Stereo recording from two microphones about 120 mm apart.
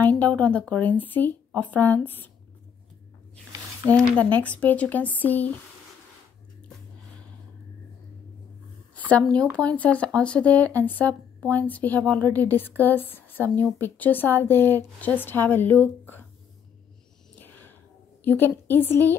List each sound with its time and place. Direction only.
0.0 s a woman's voice: 10° left (ahead or behind)
4.0 s a woman's voice: 15° left (ahead or behind)
9.3 s a woman's voice: 10° left (ahead or behind)
17.4 s a sound: 15° left (ahead or behind)
18.2 s a woman's voice: 15° left (ahead or behind)